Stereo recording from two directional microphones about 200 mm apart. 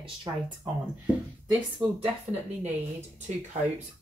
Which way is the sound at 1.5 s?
10° right (ahead or behind).